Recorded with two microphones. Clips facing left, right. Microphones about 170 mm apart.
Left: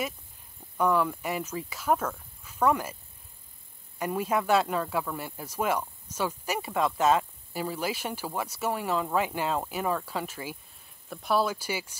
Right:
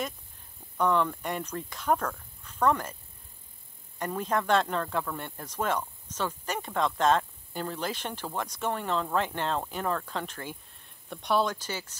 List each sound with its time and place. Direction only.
0.7 s speech: 5° left (ahead or behind)
4.0 s speech: 10° left (ahead or behind)